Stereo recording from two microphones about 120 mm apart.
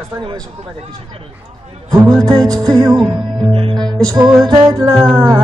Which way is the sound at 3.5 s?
50° right (ahead or behind).